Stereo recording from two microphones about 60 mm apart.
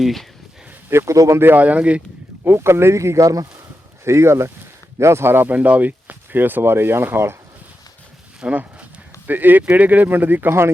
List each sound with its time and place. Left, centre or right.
0.0 s speech: centre
0.9 s speech: right
1.1 s speech: right
1.5 s speech: right
2.4 s speech: right
4.0 s speech: right
5.5 s speech: right
8.4 s speech: right